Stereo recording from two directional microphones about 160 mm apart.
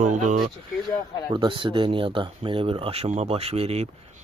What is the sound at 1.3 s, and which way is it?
Speech, 30° right (ahead or behind).